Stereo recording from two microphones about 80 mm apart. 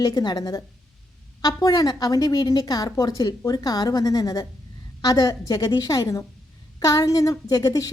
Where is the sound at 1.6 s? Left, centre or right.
Left.